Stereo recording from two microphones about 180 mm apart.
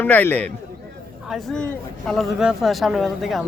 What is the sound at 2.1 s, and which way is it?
Speech, centre (ahead or behind).